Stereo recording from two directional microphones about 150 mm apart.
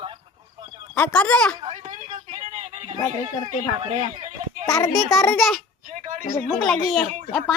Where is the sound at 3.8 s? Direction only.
50° right (ahead or behind).